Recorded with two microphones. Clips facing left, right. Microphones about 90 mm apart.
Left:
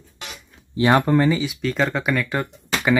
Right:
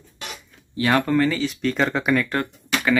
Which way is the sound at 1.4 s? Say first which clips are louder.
Even; 5° left (ahead or behind).